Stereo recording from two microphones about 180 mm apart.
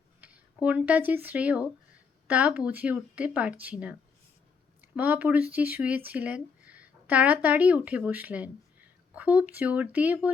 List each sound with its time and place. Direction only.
0.2 s speech: 10° right (ahead or behind)
4.9 s speech: 10° right (ahead or behind)